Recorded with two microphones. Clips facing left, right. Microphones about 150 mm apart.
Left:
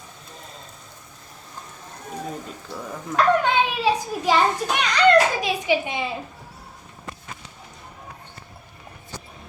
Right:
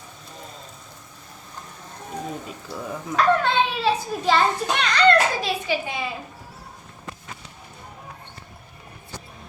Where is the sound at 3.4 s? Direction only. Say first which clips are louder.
Left 1 dB; 15° left (ahead or behind).